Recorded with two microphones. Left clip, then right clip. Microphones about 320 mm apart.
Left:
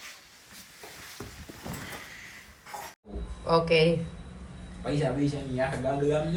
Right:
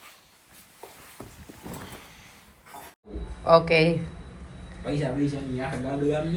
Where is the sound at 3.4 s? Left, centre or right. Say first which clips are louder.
Right 4 dB; centre.